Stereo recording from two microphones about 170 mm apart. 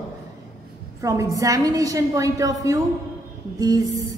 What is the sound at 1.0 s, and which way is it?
A woman's voice, 20° right (ahead or behind).